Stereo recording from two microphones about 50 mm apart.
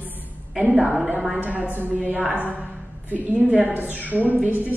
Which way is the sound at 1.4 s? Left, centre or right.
Right.